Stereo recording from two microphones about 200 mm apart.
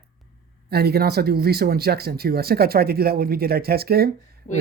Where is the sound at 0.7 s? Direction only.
50° right (ahead or behind).